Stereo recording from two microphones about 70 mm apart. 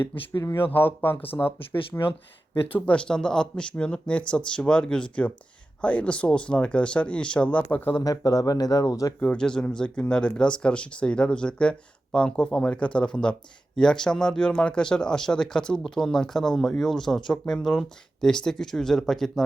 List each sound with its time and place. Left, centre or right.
0.4 s speech: left
2.7 s speech: centre
7.9 s speech: left
9.4 s speech: centre